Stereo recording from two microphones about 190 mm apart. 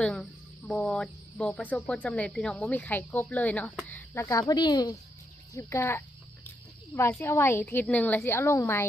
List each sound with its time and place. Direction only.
0.0 s speech: 5° left (ahead or behind)